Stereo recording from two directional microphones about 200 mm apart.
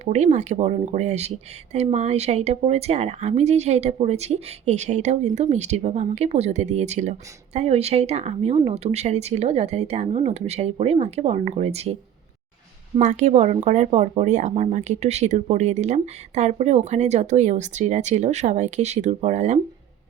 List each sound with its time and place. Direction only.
0.0 s speech: 35° right (ahead or behind)
13.0 s speech: 35° right (ahead or behind)